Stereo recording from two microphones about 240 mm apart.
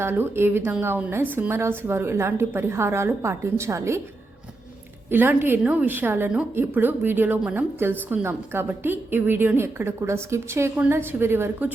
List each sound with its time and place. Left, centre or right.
0.0 s a woman's voice: centre
5.1 s a woman's voice: centre